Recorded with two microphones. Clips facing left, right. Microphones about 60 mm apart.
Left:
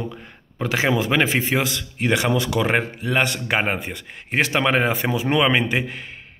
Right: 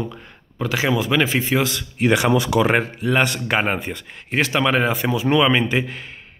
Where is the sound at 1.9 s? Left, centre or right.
Centre.